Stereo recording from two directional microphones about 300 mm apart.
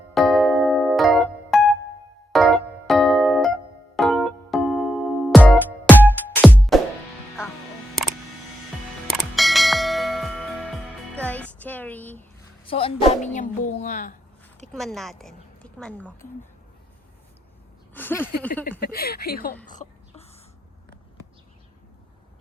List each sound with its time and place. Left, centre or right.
0.1 s music: centre
9.0 s bell: centre
11.1 s music: centre
12.6 s speech: centre
14.7 s a woman's voice: centre
17.9 s speech: centre
18.8 s speech: left
19.6 s a sound: left